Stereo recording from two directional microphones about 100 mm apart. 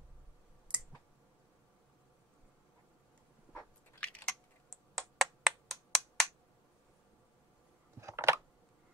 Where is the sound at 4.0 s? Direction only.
10° left (ahead or behind).